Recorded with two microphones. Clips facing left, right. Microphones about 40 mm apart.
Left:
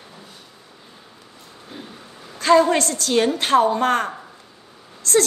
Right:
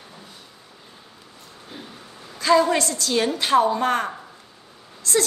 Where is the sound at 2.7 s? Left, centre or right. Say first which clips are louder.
Left 3 dB; left.